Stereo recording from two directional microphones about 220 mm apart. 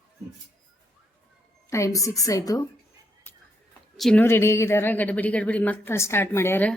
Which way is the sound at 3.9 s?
5° left (ahead or behind).